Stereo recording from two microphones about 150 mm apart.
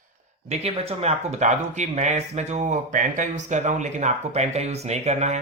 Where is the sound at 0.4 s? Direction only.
45° right (ahead or behind).